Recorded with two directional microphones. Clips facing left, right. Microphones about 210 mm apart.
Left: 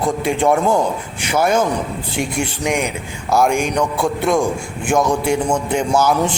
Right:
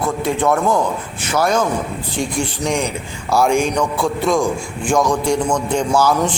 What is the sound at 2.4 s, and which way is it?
A man's voice, 10° left (ahead or behind).